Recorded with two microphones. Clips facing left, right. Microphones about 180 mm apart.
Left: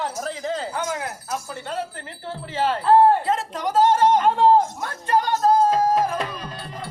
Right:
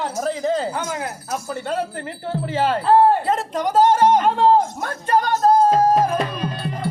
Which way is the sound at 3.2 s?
40° right (ahead or behind).